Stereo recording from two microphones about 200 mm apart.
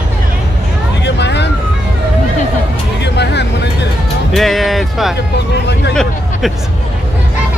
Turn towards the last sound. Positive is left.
turn(degrees=5)  # may be behind; listen again after turning